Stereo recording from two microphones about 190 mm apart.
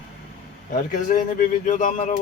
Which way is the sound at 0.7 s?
45° left (ahead or behind).